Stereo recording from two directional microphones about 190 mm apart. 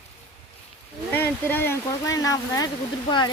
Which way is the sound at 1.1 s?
10° left (ahead or behind).